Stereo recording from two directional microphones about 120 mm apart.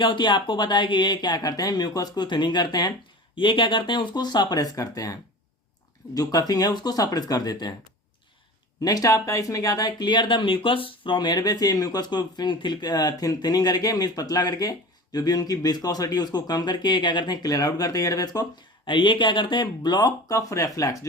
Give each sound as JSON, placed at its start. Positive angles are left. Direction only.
{"t": 0.0, "sound": "speech", "side_deg": 40}
{"t": 6.1, "sound": "speech", "side_deg": 30}
{"t": 8.8, "sound": "speech", "side_deg": 30}
{"t": 18.9, "sound": "speech", "side_deg": 45}